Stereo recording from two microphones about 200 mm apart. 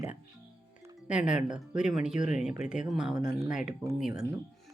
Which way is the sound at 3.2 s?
20° right (ahead or behind).